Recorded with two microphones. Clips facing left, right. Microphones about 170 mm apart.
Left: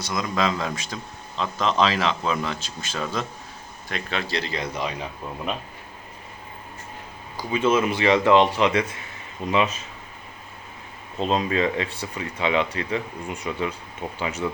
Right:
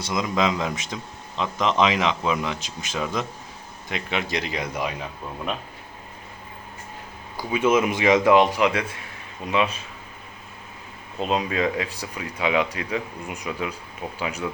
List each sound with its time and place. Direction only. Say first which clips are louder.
0.0 s speech: right 1 dB; 20° right (ahead or behind)
7.5 s speech: right 1 dB; 10° right (ahead or behind)
11.2 s speech: left 1 dB; 5° right (ahead or behind)
14.0 s speech: left 1 dB; centre (ahead or behind)